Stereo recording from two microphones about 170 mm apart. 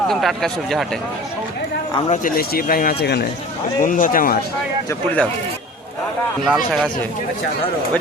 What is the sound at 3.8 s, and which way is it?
Speech, 50° left (ahead or behind).